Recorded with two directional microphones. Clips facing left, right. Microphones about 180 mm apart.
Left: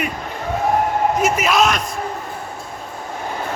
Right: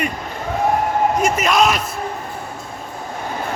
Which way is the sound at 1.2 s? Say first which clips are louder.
Left 1 dB; 5° left (ahead or behind).